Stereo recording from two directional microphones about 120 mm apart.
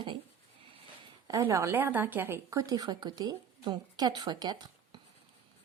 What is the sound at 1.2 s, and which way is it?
A woman's voice, 30° right (ahead or behind).